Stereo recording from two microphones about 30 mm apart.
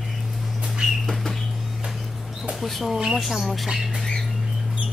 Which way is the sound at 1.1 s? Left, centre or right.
Centre.